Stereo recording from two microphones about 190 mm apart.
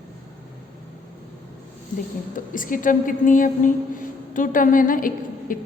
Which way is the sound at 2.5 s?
45° left (ahead or behind).